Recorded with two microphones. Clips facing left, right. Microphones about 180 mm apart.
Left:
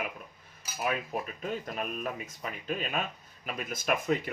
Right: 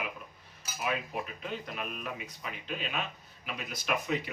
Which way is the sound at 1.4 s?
45° left (ahead or behind).